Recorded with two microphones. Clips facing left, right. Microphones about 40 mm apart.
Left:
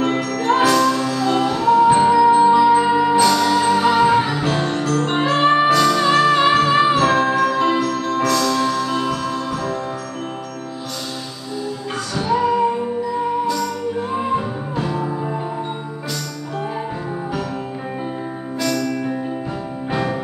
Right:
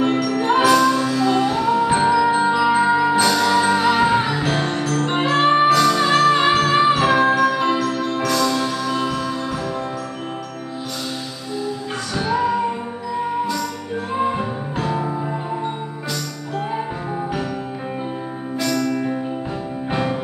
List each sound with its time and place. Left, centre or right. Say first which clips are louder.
0.3 s music: even; right; by 5.5 s centre
5.5 s music: right 1 dB; centre
7.2 s music: even; centre
12.3 s music: left 3 dB; centre
14.1 s music: right 3 dB; centre
18.9 s music: right 1 dB; centre